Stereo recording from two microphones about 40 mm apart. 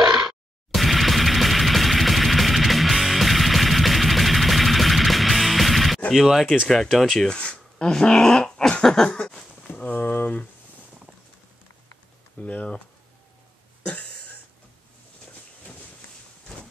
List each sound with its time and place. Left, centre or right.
0.0 s music: centre
0.7 s music: centre
6.1 s speech: centre
6.7 s speech: centre
7.2 s speech: left
9.8 s speech: left
12.4 s speech: left